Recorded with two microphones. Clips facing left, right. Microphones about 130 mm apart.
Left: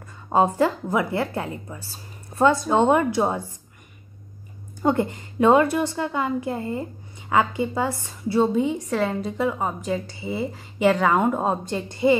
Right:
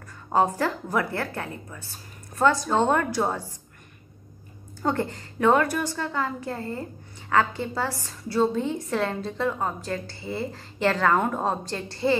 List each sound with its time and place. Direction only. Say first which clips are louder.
0.3 s a woman's voice: left 3 dB; 20° left (ahead or behind)
4.8 s a woman's voice: left 5 dB; 20° left (ahead or behind)